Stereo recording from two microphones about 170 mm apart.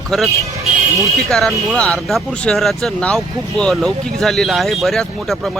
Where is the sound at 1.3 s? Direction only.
5° left (ahead or behind).